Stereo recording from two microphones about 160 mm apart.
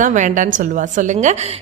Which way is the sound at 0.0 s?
50° right (ahead or behind).